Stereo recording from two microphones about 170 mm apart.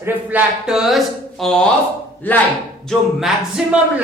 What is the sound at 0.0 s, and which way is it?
A woman's voice, 10° right (ahead or behind).